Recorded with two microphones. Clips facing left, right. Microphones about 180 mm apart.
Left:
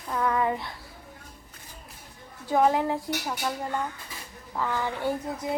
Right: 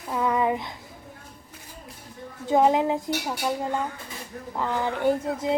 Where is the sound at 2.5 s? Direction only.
20° right (ahead or behind).